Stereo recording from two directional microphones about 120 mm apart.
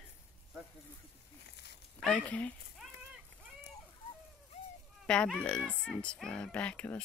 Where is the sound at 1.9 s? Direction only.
10° left (ahead or behind).